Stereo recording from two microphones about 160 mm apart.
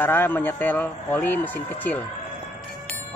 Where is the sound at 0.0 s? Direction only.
15° left (ahead or behind).